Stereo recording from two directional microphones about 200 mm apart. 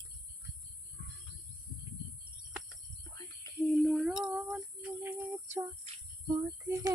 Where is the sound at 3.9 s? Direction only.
5° right (ahead or behind).